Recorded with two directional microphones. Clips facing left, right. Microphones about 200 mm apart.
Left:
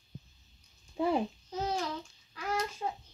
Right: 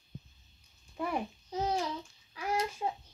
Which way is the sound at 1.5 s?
15° right (ahead or behind).